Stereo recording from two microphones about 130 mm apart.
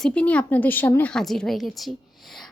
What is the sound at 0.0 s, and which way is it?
Speech, 10° left (ahead or behind).